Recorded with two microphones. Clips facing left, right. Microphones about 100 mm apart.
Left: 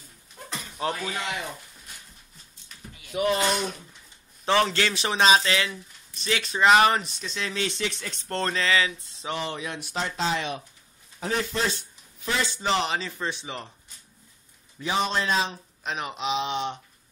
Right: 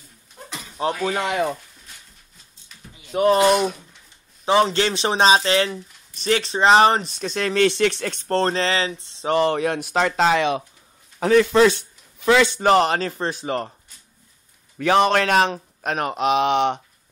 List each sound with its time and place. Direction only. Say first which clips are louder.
0.5 s a sound: even; centre (ahead or behind)
1.0 s a man's voice: right 10 dB; 55° right (ahead or behind)
3.1 s speech: right 7 dB; 40° right (ahead or behind)
4.5 s speech: right 5 dB; 20° right (ahead or behind); by 5.8 s 40° right (ahead or behind)
6.4 s a sound: right 3 dB; 30° right (ahead or behind)
7.2 s a man's voice: right 11 dB; 55° right (ahead or behind)
8.3 s a sound: right 5 dB; 35° right (ahead or behind)
9.3 s a man's voice: right 12 dB; 60° right (ahead or behind); by 11.8 s 85° right
12.3 s speech: right 11 dB; 70° right (ahead or behind); by 13.7 s 45° right (ahead or behind)
14.8 s a man's voice: right 9 dB; 65° right (ahead or behind)